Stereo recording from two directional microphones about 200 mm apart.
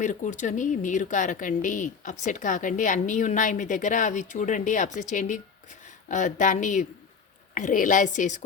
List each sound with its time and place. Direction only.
0.0 s a woman's voice: 40° left (ahead or behind)